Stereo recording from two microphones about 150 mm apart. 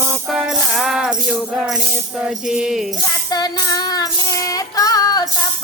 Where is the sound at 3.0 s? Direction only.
25° left (ahead or behind).